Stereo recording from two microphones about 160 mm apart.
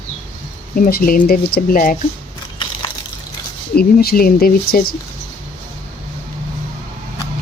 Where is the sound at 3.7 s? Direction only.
70° left (ahead or behind).